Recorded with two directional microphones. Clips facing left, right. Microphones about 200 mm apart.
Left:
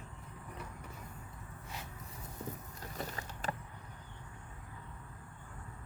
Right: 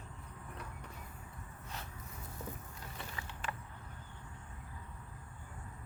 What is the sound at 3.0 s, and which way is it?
Vehicle, 40° left (ahead or behind).